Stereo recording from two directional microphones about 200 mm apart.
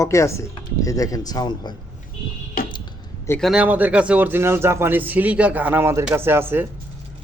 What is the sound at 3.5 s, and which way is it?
A man's voice, 5° right (ahead or behind).